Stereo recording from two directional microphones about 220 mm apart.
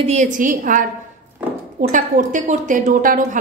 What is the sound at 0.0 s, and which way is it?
A woman's voice, 30° right (ahead or behind).